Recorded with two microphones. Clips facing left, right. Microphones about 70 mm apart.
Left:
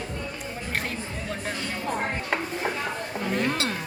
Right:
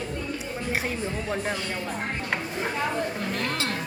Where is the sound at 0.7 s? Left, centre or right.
Centre.